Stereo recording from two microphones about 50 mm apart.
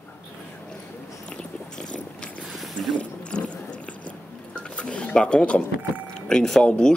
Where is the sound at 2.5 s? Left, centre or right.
Centre.